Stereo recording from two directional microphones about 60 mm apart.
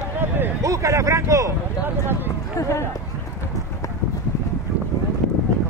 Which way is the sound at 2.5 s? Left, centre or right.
Left.